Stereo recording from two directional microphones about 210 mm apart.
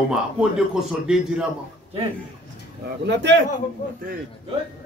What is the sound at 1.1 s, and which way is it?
Speech, 5° right (ahead or behind).